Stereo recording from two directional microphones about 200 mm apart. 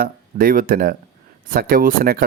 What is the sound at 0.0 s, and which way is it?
Speech, 45° right (ahead or behind).